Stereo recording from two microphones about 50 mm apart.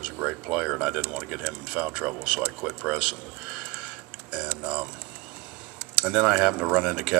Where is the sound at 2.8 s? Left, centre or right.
Right.